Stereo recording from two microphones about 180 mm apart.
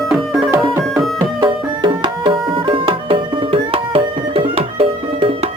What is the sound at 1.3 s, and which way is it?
Music, 25° right (ahead or behind).